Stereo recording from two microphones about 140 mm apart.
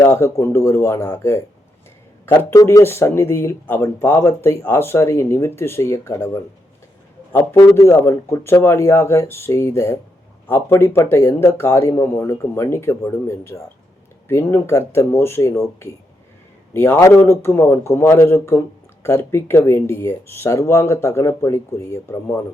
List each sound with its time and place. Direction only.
0.0 s speech: 20° left (ahead or behind)
7.8 s speech: 20° left (ahead or behind)